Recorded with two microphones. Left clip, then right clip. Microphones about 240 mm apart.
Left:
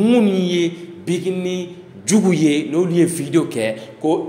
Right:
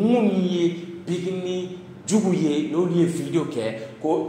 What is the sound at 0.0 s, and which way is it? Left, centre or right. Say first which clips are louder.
A man's voice: left 5 dB; left.